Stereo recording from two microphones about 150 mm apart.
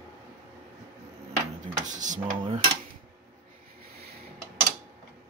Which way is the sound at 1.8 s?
55° right (ahead or behind).